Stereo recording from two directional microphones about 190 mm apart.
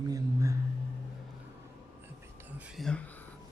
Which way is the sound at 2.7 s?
Centre (ahead or behind).